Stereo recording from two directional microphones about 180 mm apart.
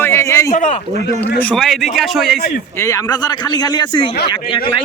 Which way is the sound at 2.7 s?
15° left (ahead or behind).